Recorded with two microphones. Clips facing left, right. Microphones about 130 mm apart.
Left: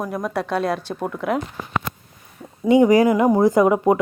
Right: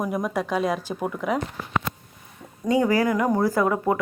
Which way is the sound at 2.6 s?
20° left (ahead or behind).